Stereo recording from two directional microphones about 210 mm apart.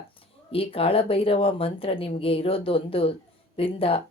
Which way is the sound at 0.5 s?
25° left (ahead or behind).